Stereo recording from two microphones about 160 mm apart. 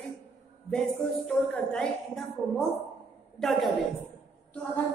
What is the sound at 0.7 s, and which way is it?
A woman's voice, 5° left (ahead or behind).